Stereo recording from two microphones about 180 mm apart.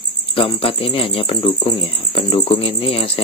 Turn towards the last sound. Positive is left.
turn(degrees=30)  # may be behind; listen again after turning